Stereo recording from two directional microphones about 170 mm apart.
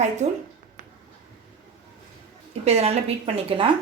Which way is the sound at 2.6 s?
40° right (ahead or behind).